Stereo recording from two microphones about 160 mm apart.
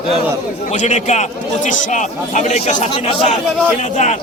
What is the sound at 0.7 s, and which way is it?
A man's voice, 50° left (ahead or behind).